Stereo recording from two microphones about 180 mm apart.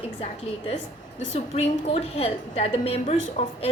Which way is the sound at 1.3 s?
35° left (ahead or behind).